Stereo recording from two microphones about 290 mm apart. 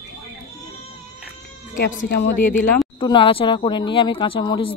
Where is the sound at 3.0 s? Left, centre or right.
Centre.